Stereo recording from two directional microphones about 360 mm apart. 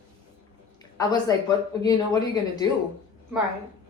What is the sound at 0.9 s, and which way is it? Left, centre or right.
A woman's voice, centre.